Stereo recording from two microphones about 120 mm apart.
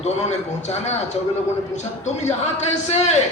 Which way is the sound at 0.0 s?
65° left (ahead or behind).